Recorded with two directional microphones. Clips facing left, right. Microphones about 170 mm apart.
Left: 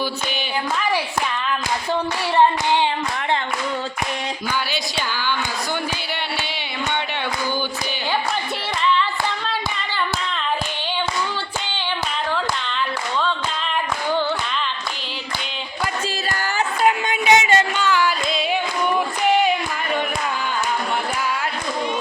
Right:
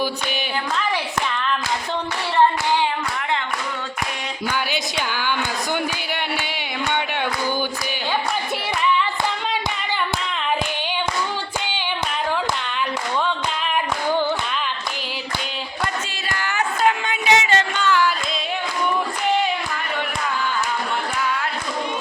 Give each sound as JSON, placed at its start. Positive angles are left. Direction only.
{"t": 2.3, "sound": "clapping", "side_deg": 15}
{"t": 4.7, "sound": "a woman's voice", "side_deg": -15}
{"t": 16.8, "sound": "a sound", "side_deg": 15}